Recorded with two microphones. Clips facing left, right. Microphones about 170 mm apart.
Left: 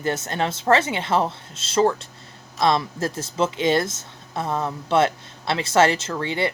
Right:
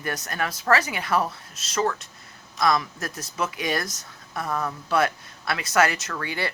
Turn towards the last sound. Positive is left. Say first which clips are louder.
# left 6 dB
turn(degrees=25)  # may be behind; listen again after turning